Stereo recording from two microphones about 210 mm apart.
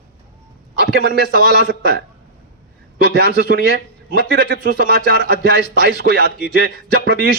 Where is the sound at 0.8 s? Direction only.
50° right (ahead or behind).